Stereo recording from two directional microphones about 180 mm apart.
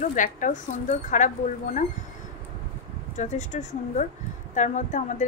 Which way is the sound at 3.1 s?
40° left (ahead or behind).